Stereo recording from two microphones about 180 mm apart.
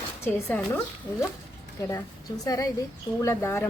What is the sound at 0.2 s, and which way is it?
Speech, 10° left (ahead or behind).